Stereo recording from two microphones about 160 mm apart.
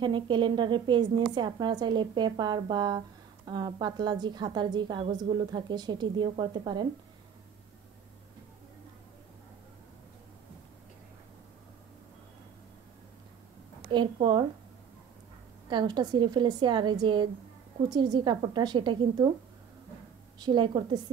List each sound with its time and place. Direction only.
0.0 s a woman's voice: 30° right (ahead or behind)
13.8 s a woman's voice: 30° right (ahead or behind)
15.7 s a woman's voice: 25° right (ahead or behind)
20.3 s a woman's voice: 30° right (ahead or behind)